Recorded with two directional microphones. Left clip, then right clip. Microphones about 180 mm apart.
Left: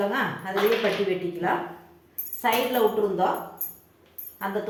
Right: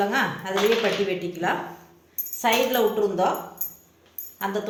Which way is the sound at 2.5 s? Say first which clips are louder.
Right 2 dB; 55° right (ahead or behind).